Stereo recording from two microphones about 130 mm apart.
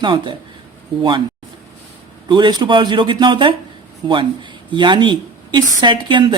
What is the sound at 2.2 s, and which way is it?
A woman's voice, 35° right (ahead or behind).